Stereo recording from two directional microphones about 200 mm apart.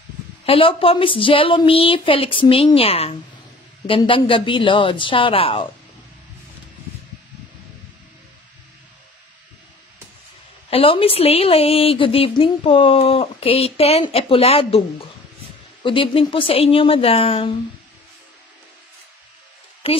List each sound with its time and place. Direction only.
0.5 s a woman's voice: 25° left (ahead or behind)
10.7 s a woman's voice: 30° left (ahead or behind)